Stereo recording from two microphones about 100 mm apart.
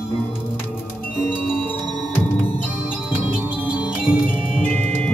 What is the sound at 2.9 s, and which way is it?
Music, 10° right (ahead or behind).